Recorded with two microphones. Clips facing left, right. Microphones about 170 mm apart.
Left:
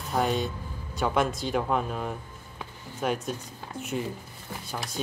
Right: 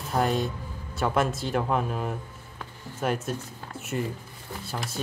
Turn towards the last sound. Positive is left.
turn(degrees=-5)  # may be behind; listen again after turning